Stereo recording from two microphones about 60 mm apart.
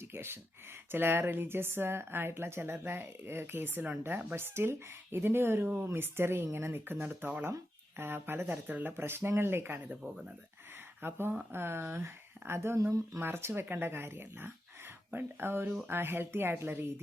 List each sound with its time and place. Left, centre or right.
0.0 s speech: right
4.4 s speech: right
5.6 s speech: right
5.9 s speech: right
9.0 s speech: right
11.0 s speech: right